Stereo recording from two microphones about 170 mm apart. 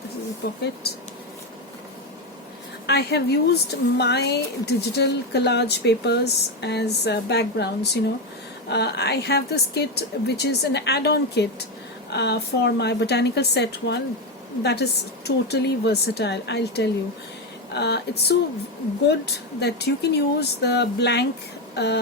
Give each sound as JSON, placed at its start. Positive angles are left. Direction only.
{"t": 0.4, "sound": "speech", "side_deg": 70}
{"t": 2.8, "sound": "a woman's voice", "side_deg": 75}